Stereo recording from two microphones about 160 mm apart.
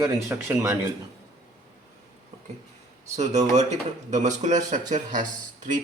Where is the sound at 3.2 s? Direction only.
45° right (ahead or behind).